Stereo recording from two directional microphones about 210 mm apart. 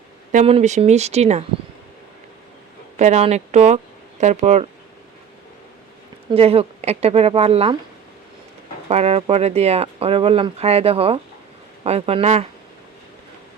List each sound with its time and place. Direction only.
0.3 s speech: 30° right (ahead or behind)
3.0 s speech: 30° right (ahead or behind)
6.3 s speech: 25° right (ahead or behind)
8.9 s speech: 30° right (ahead or behind)